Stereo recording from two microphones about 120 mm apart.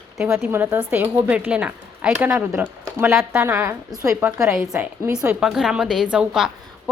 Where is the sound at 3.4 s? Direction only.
15° right (ahead or behind).